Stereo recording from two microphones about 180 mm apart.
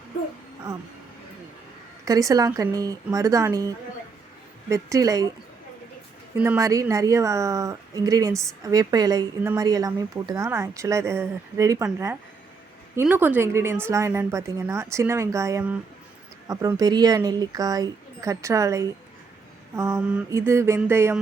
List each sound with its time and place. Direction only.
2.0 s speech: 20° right (ahead or behind)
4.7 s speech: 20° right (ahead or behind)
6.4 s speech: 15° right (ahead or behind)